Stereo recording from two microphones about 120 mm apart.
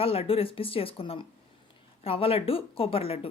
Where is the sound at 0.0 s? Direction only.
50° left (ahead or behind).